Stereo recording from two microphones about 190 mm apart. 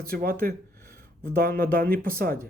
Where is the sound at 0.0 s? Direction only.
50° right (ahead or behind).